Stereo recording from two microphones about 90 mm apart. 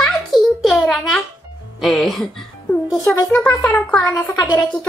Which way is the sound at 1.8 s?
5° left (ahead or behind).